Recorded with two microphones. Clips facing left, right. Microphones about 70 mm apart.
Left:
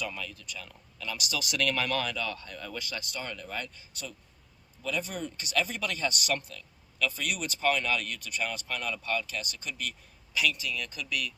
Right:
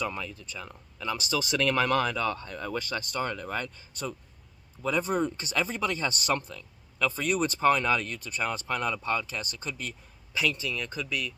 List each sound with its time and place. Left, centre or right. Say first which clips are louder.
0.0 s speech: right 4 dB; right